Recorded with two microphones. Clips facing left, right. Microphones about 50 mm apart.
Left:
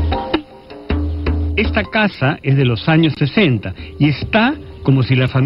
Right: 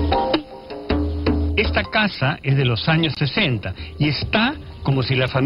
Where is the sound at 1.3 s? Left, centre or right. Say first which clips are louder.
Left 5 dB; centre.